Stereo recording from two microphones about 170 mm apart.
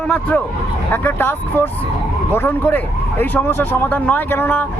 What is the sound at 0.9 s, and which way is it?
Speech, 10° left (ahead or behind).